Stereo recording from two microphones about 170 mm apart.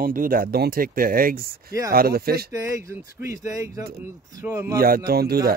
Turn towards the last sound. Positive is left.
turn(degrees=-65)  # may be behind; listen again after turning